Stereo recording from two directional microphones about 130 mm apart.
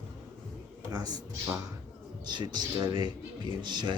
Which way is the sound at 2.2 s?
35° right (ahead or behind).